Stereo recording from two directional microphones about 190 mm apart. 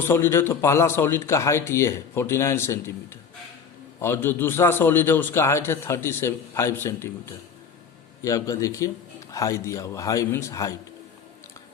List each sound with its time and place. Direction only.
0.0 s a man's voice: 10° left (ahead or behind)
4.0 s a man's voice: 10° left (ahead or behind)